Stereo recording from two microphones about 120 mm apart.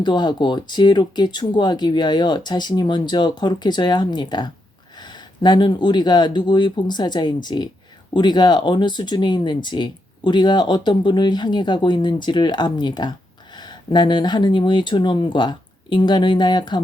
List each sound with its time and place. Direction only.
0.0 s speech: 40° left (ahead or behind)